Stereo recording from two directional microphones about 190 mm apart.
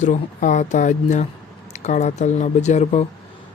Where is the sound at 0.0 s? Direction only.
40° left (ahead or behind).